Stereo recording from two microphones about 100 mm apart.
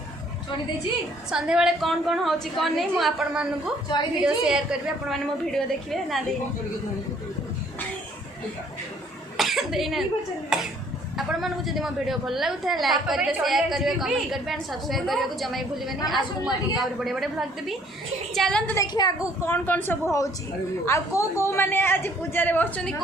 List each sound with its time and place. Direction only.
1.3 s a woman's voice: 5° right (ahead or behind)
9.4 s cough: centre (ahead or behind)
10.5 s a woman's voice: 5° right (ahead or behind)
18.8 s a woman's voice: 35° left (ahead or behind)
19.5 s a woman's voice: 20° left (ahead or behind)
20.1 s a woman's voice: 35° left (ahead or behind); by 22.8 s 20° left (ahead or behind)